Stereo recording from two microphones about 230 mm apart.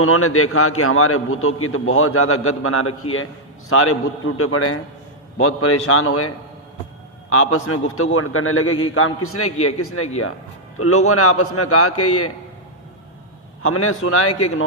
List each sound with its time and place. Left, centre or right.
0.0 s a man's voice: left
13.6 s a man's voice: left